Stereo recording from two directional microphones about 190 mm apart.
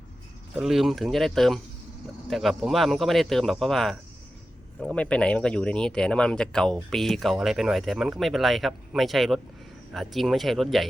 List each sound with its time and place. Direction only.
0.6 s speech: centre (ahead or behind)